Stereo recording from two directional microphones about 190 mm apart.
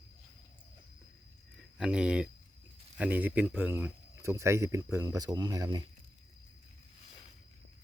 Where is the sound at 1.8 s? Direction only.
5° right (ahead or behind); by 5.8 s 20° right (ahead or behind).